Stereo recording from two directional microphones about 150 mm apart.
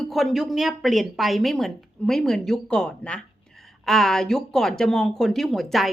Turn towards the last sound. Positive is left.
turn(degrees=0)  # may be behind; listen again after turning